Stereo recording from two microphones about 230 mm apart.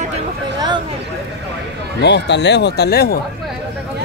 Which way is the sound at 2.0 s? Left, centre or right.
Left.